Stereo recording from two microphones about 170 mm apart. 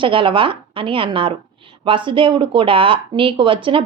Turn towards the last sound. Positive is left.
turn(degrees=-30)  # may be behind; listen again after turning